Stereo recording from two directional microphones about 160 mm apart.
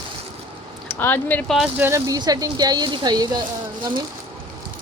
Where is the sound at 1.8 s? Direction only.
15° right (ahead or behind).